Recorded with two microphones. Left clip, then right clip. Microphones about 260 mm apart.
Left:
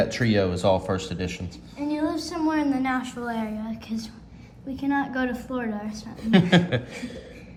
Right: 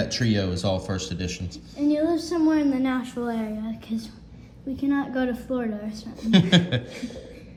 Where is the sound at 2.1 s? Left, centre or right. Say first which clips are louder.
Right 3 dB; left.